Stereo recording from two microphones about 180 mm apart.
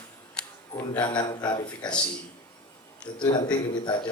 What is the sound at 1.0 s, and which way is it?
Speech, 20° left (ahead or behind).